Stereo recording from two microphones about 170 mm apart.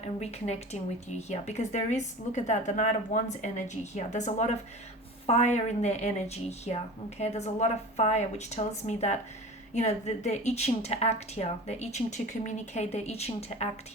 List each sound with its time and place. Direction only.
0.2 s a woman's voice: 40° left (ahead or behind)